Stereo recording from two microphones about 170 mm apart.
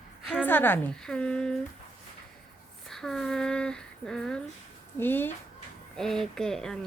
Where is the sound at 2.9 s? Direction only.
5° left (ahead or behind).